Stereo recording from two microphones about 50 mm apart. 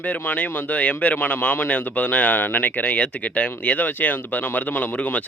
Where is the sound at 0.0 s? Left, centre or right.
Left.